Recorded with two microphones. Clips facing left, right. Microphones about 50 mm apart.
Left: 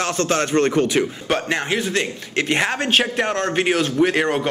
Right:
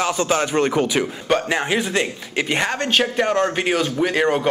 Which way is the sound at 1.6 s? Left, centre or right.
Centre.